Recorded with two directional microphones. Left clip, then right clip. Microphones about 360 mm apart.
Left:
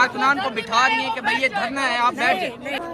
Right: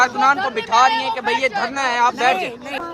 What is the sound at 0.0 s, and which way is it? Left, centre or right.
Speech, centre.